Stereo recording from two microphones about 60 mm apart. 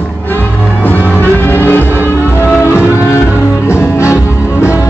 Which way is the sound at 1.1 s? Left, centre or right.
Left.